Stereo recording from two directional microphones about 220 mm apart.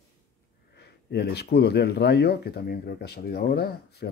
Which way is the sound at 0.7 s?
50° left (ahead or behind).